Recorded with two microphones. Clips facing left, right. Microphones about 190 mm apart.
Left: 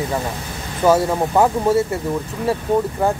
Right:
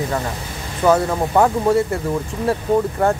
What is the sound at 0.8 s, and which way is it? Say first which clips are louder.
Speech: even; 20° left (ahead or behind).